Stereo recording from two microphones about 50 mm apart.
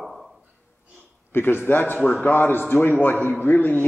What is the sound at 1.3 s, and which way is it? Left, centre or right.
A man's voice, left.